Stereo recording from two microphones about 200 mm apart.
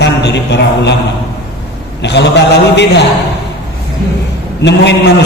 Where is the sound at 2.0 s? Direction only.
60° left (ahead or behind).